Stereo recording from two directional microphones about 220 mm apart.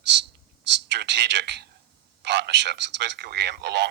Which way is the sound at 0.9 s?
55° right (ahead or behind).